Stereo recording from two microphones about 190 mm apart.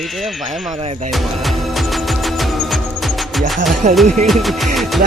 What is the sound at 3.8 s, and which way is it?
Speech, 40° right (ahead or behind).